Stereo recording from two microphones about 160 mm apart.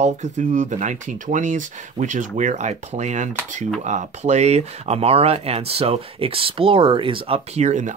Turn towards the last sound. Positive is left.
turn(degrees=-45)  # may be behind; listen again after turning